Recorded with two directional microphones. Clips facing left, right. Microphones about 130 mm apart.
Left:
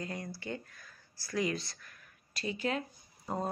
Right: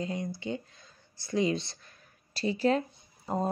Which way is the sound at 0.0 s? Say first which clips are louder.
Right 6 dB; 20° right (ahead or behind).